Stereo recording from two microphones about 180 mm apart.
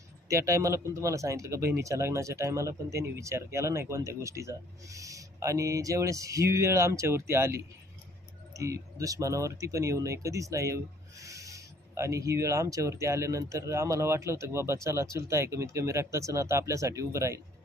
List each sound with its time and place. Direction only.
0.3 s speech: 15° right (ahead or behind)